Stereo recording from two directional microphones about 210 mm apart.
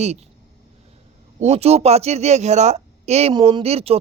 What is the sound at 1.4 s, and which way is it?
Speech, 30° right (ahead or behind).